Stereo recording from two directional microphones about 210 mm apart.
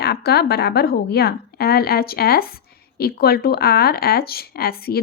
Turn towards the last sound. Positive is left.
turn(degrees=45)  # may be behind; listen again after turning